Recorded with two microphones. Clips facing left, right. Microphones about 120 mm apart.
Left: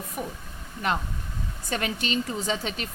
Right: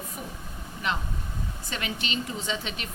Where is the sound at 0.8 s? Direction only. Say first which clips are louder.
Left 3 dB; 45° left (ahead or behind).